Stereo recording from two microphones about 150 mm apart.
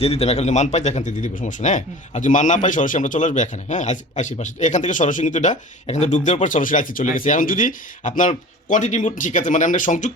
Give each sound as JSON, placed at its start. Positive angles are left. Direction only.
{"t": 0.0, "sound": "speech", "side_deg": 45}